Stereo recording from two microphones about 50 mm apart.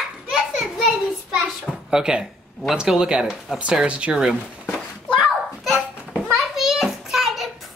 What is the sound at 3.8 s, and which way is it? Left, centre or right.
Speech, right.